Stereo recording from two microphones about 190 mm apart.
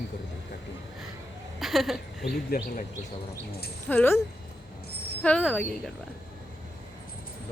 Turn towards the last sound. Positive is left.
turn(degrees=5)  # may be behind; listen again after turning